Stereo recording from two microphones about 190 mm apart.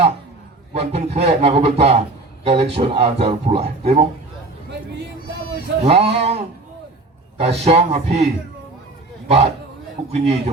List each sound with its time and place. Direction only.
0.7 s a man's voice: 35° right (ahead or behind)
5.8 s a man's voice: 35° right (ahead or behind)
10.1 s a man's voice: 35° right (ahead or behind)